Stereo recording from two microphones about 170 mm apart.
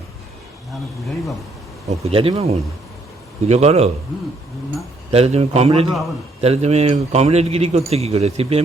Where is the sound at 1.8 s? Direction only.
35° right (ahead or behind).